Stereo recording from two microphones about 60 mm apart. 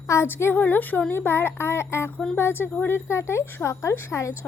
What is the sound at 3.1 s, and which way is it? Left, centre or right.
Speech, left.